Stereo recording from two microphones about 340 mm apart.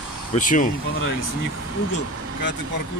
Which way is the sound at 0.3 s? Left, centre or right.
Left.